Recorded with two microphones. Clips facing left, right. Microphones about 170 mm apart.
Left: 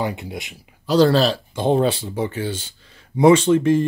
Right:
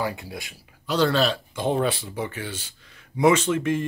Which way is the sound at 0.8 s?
35° left (ahead or behind).